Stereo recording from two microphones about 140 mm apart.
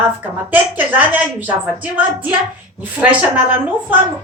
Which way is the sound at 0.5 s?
10° right (ahead or behind).